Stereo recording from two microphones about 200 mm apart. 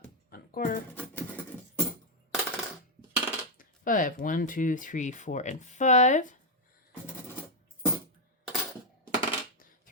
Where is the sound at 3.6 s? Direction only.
45° left (ahead or behind).